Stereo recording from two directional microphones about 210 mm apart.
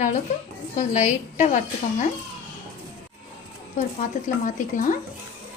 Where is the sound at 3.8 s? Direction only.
35° left (ahead or behind).